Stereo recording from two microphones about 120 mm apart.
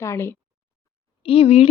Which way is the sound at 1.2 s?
55° left (ahead or behind).